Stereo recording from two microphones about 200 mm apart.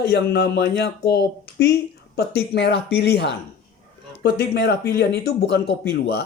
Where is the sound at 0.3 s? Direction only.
55° left (ahead or behind).